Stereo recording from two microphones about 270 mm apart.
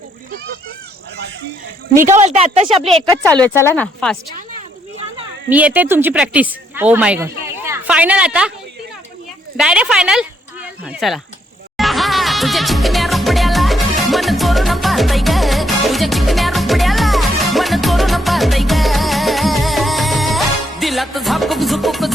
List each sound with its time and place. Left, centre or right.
2.0 s a woman's voice: right
3.4 s speech: centre
5.5 s a woman's voice: centre
9.6 s speech: centre
11.8 s music: centre